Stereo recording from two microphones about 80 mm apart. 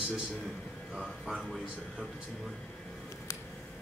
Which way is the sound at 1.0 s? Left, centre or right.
Centre.